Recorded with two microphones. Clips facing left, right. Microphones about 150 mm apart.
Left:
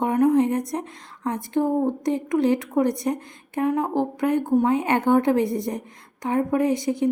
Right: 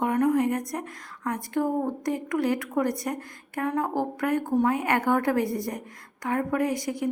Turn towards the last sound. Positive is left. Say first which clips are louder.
# left 5 dB
turn(degrees=25)  # may be behind; listen again after turning